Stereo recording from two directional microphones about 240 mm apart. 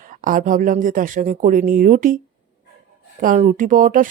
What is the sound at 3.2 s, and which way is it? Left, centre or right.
Speech, right.